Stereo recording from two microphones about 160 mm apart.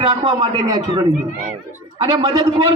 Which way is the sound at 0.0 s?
25° right (ahead or behind).